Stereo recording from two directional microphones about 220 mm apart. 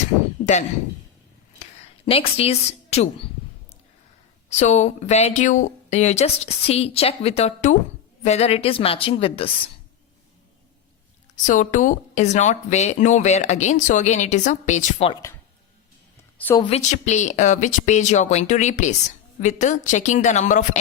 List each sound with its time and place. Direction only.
0.4 s a sound: 40° left (ahead or behind)
2.0 s a woman's voice: 25° left (ahead or behind)
4.4 s a woman's voice: 30° left (ahead or behind)
11.4 s speech: 35° left (ahead or behind)
16.6 s speech: 25° left (ahead or behind)